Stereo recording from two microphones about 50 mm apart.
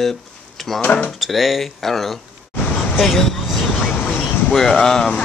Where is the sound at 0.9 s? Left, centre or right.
Left.